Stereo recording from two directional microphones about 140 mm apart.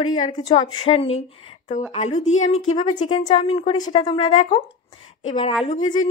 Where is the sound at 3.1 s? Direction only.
40° left (ahead or behind).